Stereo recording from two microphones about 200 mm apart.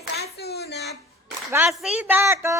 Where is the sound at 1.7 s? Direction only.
5° right (ahead or behind).